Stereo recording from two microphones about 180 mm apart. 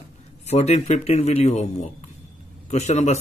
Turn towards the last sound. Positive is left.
turn(degrees=40)  # may be behind; listen again after turning